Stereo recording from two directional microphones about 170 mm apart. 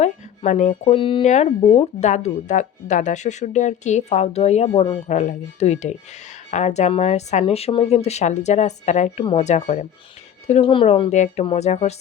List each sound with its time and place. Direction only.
0.0 s a sound: 45° left (ahead or behind)
0.9 s a woman's voice: 30° left (ahead or behind)
1.2 s a woman's voice: 40° left (ahead or behind)